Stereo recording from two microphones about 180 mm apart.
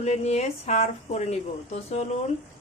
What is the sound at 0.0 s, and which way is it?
A woman's voice, 40° left (ahead or behind).